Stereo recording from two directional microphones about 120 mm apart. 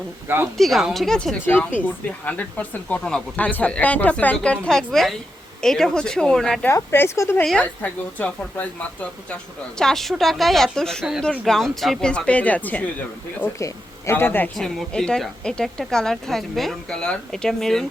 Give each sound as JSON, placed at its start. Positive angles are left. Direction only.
{"t": 0.5, "sound": "speech", "side_deg": 0}
{"t": 6.7, "sound": "speech", "side_deg": 20}
{"t": 7.4, "sound": "speech", "side_deg": 10}
{"t": 13.6, "sound": "speech", "side_deg": 25}
{"t": 14.5, "sound": "speech", "side_deg": 5}